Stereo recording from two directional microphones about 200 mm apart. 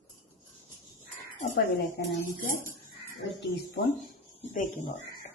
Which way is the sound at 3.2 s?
65° left (ahead or behind).